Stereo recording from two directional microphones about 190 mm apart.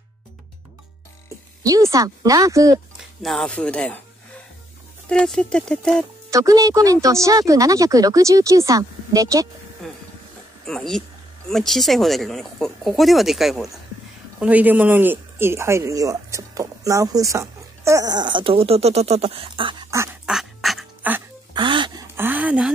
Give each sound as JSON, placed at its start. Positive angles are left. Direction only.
{"t": 1.6, "sound": "speech", "side_deg": -20}
{"t": 3.0, "sound": "speech", "side_deg": 0}
{"t": 5.1, "sound": "speech", "side_deg": 5}
{"t": 6.3, "sound": "speech", "side_deg": -20}
{"t": 9.8, "sound": "a sound", "side_deg": 0}
{"t": 10.7, "sound": "speech", "side_deg": 0}
{"t": 20.2, "sound": "duck", "side_deg": 0}
{"t": 21.5, "sound": "dog", "side_deg": -25}
{"t": 22.1, "sound": "a sound", "side_deg": -10}